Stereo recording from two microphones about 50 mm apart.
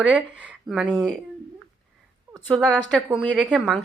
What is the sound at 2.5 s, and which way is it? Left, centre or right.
Speech, left.